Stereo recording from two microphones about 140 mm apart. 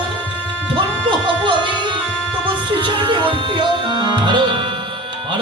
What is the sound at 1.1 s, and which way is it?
Music, 35° right (ahead or behind).